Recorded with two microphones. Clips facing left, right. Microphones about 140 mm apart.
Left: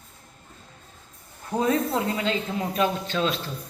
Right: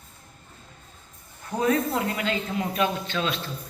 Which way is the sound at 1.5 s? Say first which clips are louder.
Even; 25° left (ahead or behind).